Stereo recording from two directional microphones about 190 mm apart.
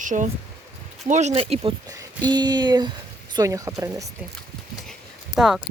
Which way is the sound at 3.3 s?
15° right (ahead or behind).